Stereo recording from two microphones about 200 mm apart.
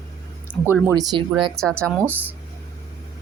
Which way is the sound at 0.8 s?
20° right (ahead or behind).